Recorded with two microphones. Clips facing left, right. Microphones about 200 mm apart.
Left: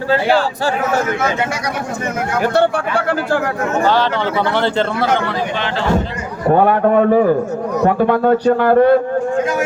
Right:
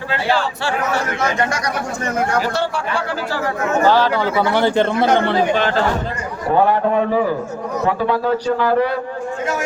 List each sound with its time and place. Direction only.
2.4 s speech: 55° left (ahead or behind)
3.8 s speech: 10° right (ahead or behind)
5.5 s speech: 45° right (ahead or behind)
6.5 s a man's voice: 55° left (ahead or behind)